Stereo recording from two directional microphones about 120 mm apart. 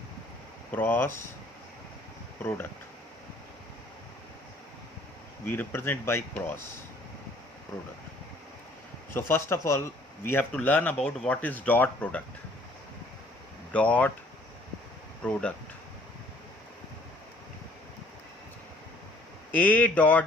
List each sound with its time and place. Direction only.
0.7 s speech: 15° left (ahead or behind)
2.4 s speech: 15° left (ahead or behind)
5.5 s speech: 20° left (ahead or behind)
9.1 s speech: 20° left (ahead or behind)
13.7 s speech: 10° left (ahead or behind)
15.2 s speech: 10° left (ahead or behind)
19.5 s speech: 15° left (ahead or behind)